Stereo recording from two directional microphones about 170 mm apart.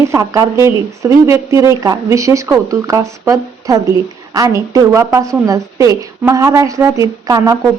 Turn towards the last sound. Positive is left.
turn(degrees=-20)  # may be behind; listen again after turning